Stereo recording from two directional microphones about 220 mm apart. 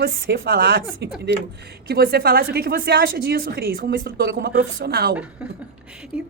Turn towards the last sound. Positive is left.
turn(degrees=-5)  # may be behind; listen again after turning